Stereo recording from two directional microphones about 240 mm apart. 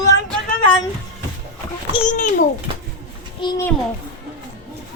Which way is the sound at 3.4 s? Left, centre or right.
Left.